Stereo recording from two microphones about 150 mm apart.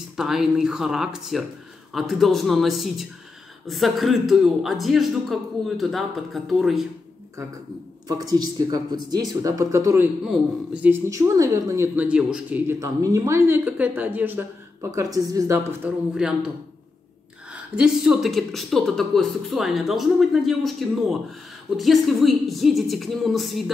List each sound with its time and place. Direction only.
0.1 s speech: 5° right (ahead or behind)
8.1 s speech: 25° right (ahead or behind)
10.2 s speech: 5° right (ahead or behind)
11.1 s speech: 20° right (ahead or behind)
16.2 s speech: 5° right (ahead or behind)